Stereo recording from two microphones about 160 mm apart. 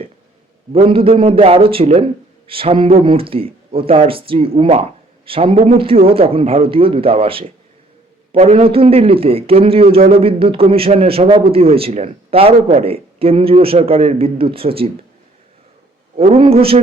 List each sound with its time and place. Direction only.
0.7 s speech: 35° right (ahead or behind)
16.1 s speech: 40° right (ahead or behind)